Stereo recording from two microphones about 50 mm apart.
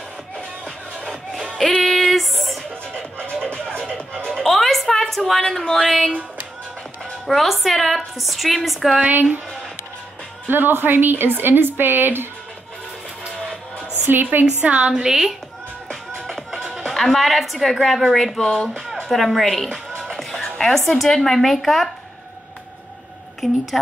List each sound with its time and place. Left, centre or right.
1.6 s music: centre
3.0 s music: centre
4.4 s a sound: centre
7.2 s a woman's voice: centre
9.0 s speech: right
10.4 s a woman's voice: right
14.1 s speech: right
14.6 s a woman's voice: right
15.9 s music: centre
16.8 s a woman's voice: centre
20.1 s music: centre
21.0 s a woman's voice: centre
23.4 s a woman's voice: centre